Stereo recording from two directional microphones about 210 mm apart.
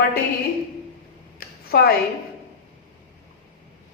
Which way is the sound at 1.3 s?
45° left (ahead or behind).